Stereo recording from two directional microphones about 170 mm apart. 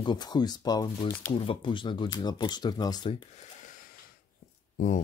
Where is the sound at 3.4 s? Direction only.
50° left (ahead or behind).